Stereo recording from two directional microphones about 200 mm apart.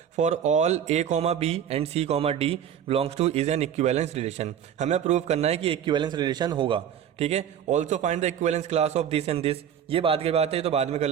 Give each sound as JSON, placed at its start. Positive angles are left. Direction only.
{"t": 0.2, "sound": "a man's voice", "side_deg": -35}